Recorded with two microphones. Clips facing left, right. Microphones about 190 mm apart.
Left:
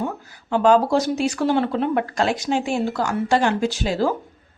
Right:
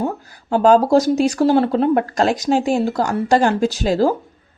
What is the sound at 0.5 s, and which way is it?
Speech, 40° right (ahead or behind).